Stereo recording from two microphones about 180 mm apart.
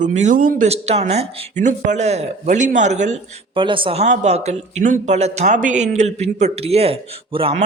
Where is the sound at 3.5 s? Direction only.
30° right (ahead or behind).